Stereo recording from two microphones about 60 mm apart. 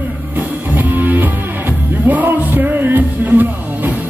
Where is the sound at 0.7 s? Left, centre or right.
Right.